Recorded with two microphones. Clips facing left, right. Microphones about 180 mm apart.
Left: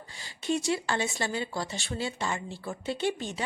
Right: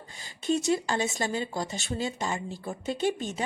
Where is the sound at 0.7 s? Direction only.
40° right (ahead or behind).